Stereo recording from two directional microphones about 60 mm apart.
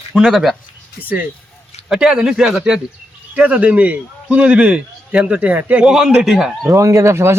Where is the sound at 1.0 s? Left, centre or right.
Right.